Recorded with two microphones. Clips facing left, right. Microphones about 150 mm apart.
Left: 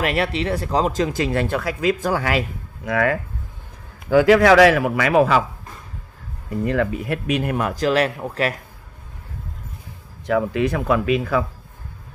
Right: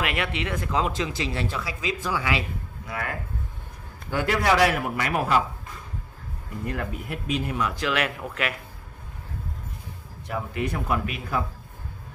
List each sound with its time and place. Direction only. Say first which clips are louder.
0.0 s speech: left 6 dB; 35° left (ahead or behind)
2.8 s a man's voice: left 13 dB; 90° left
4.2 s a man's voice: left 9 dB; 90° left
6.6 s speech: left 10 dB; 90° left; by 8.5 s 35° left (ahead or behind)
10.2 s a man's voice: left 10 dB; 90° left